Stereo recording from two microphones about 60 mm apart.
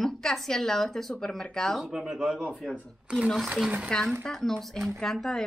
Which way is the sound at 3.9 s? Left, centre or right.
Centre.